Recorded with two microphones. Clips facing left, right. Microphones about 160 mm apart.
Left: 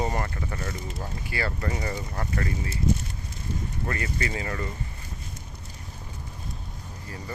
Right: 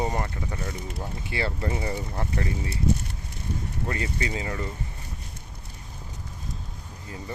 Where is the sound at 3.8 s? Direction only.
20° right (ahead or behind).